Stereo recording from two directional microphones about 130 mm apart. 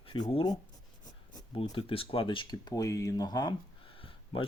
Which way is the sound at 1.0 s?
30° left (ahead or behind).